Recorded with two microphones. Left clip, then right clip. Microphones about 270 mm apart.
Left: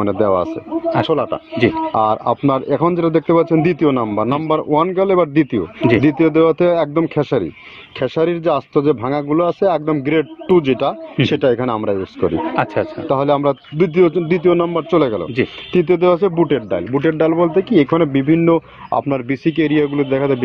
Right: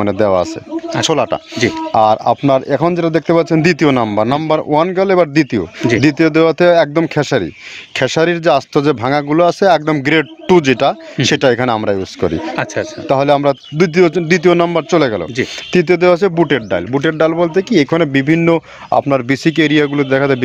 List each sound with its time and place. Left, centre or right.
0.0 s speech: right